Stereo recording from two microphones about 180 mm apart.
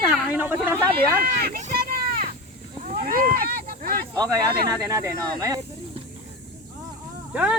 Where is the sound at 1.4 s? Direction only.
55° right (ahead or behind).